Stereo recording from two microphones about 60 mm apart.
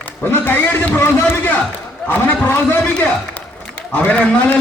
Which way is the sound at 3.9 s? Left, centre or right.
Left.